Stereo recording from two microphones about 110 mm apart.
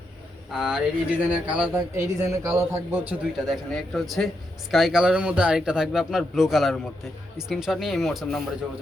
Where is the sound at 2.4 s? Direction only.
25° right (ahead or behind).